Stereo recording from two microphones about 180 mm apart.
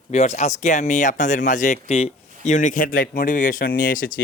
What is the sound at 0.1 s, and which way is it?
Speech, 40° left (ahead or behind).